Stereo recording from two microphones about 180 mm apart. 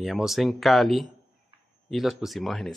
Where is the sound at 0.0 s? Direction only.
Centre (ahead or behind).